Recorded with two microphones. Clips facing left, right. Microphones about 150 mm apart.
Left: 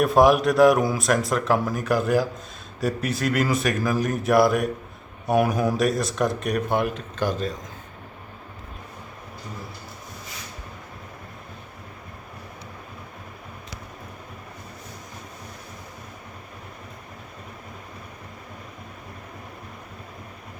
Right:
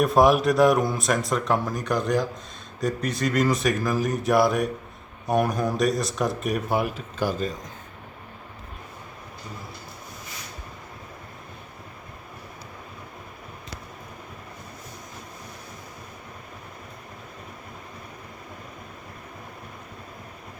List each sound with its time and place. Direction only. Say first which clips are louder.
0.0 s speech: left 1 dB; centre (ahead or behind)